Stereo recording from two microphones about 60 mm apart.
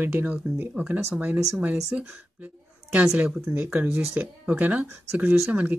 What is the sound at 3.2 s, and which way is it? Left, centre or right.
Speech, right.